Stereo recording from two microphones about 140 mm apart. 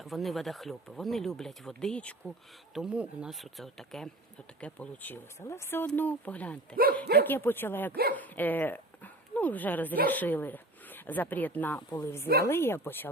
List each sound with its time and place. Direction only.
0.0 s speech: centre (ahead or behind)
2.7 s speech: 5° right (ahead or behind); by 13.1 s 15° left (ahead or behind)